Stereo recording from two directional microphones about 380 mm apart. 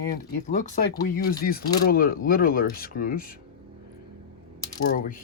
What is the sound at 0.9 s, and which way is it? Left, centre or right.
Speech, left.